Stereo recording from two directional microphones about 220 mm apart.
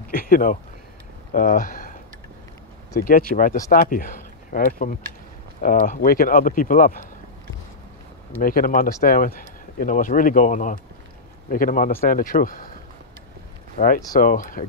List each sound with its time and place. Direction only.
0.1 s speech: 40° left (ahead or behind)
3.0 s speech: 40° left (ahead or behind)
8.4 s speech: 40° left (ahead or behind)
13.7 s speech: 40° left (ahead or behind)